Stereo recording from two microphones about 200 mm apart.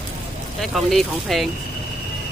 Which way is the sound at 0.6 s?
Centre (ahead or behind).